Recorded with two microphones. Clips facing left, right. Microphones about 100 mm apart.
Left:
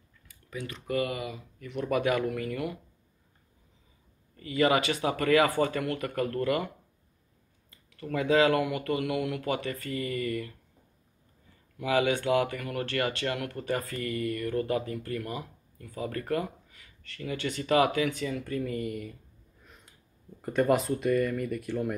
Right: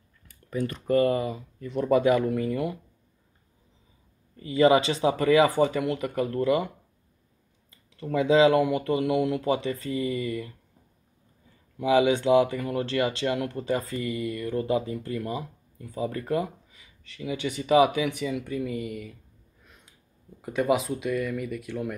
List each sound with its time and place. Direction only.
0.5 s speech: 45° right (ahead or behind); by 2.8 s 25° right (ahead or behind)
4.4 s speech: 25° right (ahead or behind)
7.9 s speech: 20° right (ahead or behind)
11.8 s speech: 20° right (ahead or behind); by 19.1 s centre (ahead or behind)
19.6 s a sound: centre (ahead or behind)
20.4 s speech: 5° right (ahead or behind)